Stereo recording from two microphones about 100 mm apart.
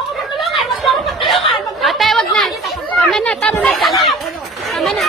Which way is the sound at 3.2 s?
15° left (ahead or behind).